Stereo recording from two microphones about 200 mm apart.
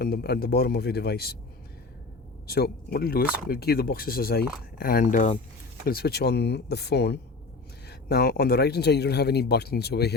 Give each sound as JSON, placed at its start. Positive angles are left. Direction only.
{"t": 0.0, "sound": "speech", "side_deg": 50}
{"t": 2.5, "sound": "speech", "side_deg": 50}